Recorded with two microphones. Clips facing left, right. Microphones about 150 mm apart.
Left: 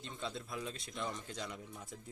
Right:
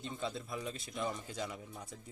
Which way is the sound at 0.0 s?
Centre (ahead or behind).